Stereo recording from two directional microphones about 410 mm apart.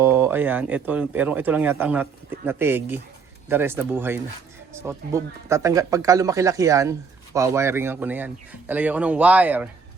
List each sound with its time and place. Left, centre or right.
0.0 s speech: centre